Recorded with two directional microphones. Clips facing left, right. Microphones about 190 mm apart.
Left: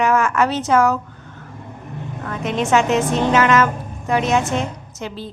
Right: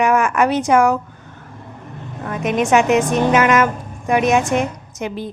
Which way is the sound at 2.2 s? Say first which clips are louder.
Right 3 dB; 15° right (ahead or behind).